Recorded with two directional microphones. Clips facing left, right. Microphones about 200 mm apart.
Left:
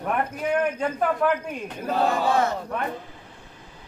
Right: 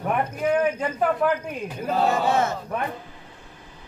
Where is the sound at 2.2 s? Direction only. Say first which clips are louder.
Even; 25° right (ahead or behind).